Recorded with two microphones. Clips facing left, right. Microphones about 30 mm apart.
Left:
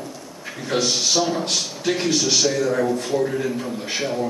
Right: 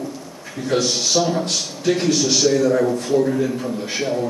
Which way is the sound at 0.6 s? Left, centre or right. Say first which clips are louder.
Right 2 dB; centre.